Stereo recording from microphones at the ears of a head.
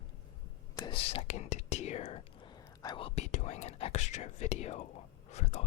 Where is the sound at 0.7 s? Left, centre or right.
Left.